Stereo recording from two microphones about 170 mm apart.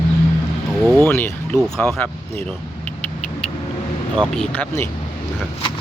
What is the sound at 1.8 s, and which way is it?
Speech, 10° left (ahead or behind).